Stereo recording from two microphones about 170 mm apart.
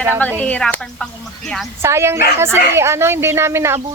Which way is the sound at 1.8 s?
15° right (ahead or behind).